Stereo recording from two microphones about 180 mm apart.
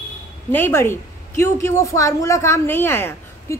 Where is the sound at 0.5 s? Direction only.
10° left (ahead or behind).